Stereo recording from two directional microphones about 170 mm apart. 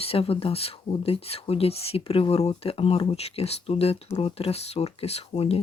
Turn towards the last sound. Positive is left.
turn(degrees=35)  # may be behind; listen again after turning